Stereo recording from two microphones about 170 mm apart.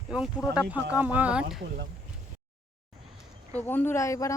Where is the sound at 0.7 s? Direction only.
10° right (ahead or behind).